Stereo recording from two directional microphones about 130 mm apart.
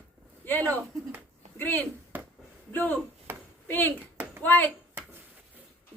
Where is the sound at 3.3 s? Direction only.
15° right (ahead or behind).